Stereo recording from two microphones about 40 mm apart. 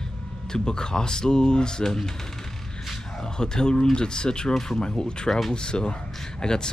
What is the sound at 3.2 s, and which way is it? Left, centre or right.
Speech, centre.